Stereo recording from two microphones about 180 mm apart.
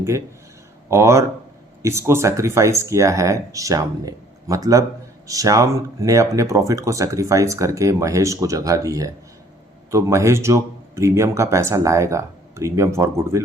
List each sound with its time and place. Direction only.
0.9 s speech: 15° right (ahead or behind)